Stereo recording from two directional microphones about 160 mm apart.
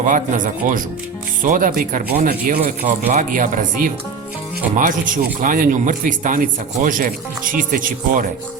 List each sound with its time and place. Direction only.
0.0 s speech: 55° right (ahead or behind)